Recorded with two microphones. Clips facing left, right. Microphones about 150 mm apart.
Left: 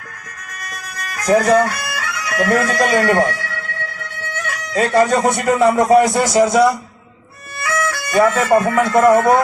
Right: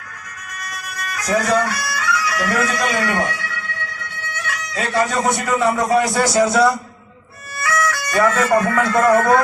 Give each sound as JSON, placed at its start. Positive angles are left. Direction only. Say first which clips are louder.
{"t": 0.6, "sound": "music", "louder": "right 1 dB", "side_deg": 50}
{"t": 4.2, "sound": "speech", "louder": "left 2 dB", "side_deg": 45}
{"t": 6.1, "sound": "speech", "louder": "left 2 dB", "side_deg": 20}